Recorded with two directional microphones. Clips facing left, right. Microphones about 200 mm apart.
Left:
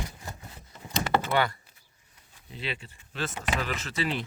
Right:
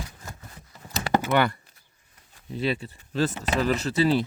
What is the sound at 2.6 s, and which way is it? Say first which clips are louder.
Speech: right 9 dB; 40° right (ahead or behind).